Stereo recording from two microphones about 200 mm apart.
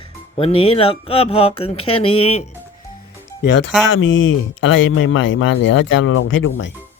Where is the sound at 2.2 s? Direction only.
30° left (ahead or behind).